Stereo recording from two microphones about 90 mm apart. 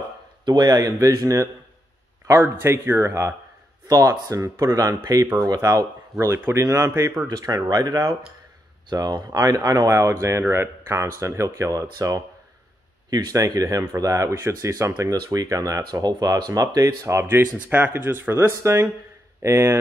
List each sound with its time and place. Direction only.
0.5 s speech: 50° right (ahead or behind)
2.2 s speech: 25° right (ahead or behind)
6.2 s speech: 30° right (ahead or behind)
7.2 s speech: 45° right (ahead or behind)
17.6 s speech: 20° right (ahead or behind)